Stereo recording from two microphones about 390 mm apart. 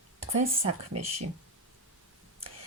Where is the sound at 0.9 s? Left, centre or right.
Right.